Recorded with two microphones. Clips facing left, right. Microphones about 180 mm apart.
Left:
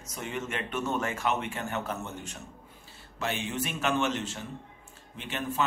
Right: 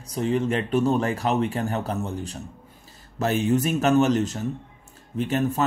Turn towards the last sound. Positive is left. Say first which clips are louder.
# right 11 dB
turn(degrees=-40)  # may be behind; listen again after turning